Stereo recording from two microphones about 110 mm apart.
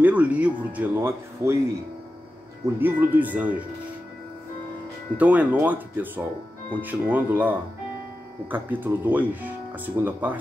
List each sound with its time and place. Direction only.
0.0 s speech: 15° right (ahead or behind)
1.0 s speech: 25° right (ahead or behind)
2.6 s speech: 15° right (ahead or behind)
5.1 s speech: 15° right (ahead or behind)